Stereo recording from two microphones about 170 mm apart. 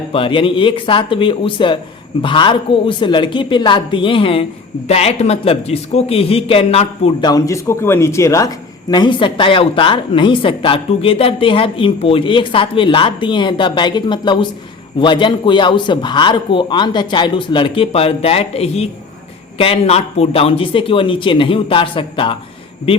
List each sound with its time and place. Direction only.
0.1 s speech: 30° left (ahead or behind)
7.2 s speech: 20° left (ahead or behind)